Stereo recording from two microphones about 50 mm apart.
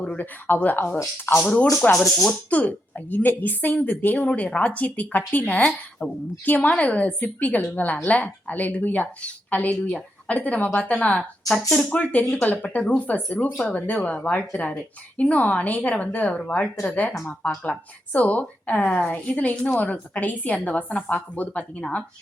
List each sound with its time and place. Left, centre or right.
0.2 s a woman's voice: left
1.3 s speech: left
1.6 s speech: centre
2.5 s a woman's voice: left
4.3 s a woman's voice: left
11.9 s a woman's voice: left